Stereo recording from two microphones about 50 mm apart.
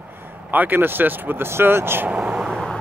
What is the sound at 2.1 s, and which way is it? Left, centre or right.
Vehicle, right.